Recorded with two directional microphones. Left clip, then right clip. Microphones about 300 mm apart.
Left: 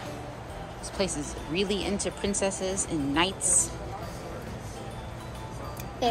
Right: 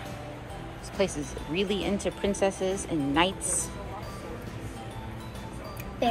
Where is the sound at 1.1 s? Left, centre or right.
Centre.